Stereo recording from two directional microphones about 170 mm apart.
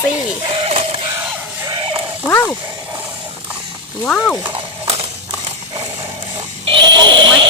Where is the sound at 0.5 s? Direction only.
35° right (ahead or behind).